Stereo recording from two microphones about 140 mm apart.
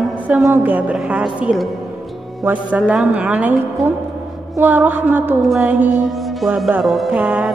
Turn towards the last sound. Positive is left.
turn(degrees=-5)  # may be behind; listen again after turning